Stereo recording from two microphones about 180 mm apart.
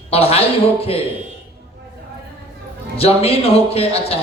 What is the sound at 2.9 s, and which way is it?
A woman's voice, 35° left (ahead or behind).